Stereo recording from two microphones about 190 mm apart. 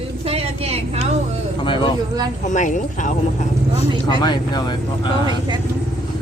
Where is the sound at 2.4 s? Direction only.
40° left (ahead or behind).